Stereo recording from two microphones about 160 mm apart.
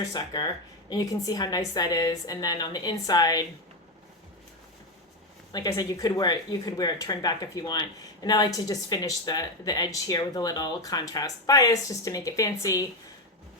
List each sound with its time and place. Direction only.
0.1 s speech: 25° left (ahead or behind)
5.5 s speech: 25° left (ahead or behind)